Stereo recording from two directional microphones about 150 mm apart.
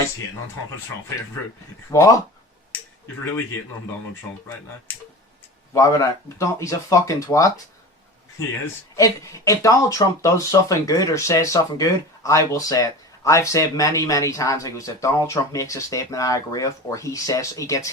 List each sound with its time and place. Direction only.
1.9 s speech: 20° left (ahead or behind)
5.7 s speech: 20° left (ahead or behind)